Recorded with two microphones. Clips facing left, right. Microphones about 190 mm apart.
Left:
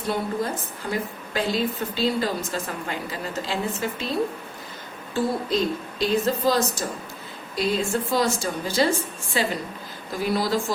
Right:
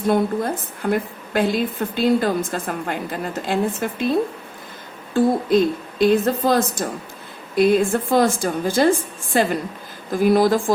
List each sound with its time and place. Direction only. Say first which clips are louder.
0.1 s a woman's voice: right 6 dB; 55° right (ahead or behind)
5.1 s a woman's voice: right 7 dB; 55° right (ahead or behind)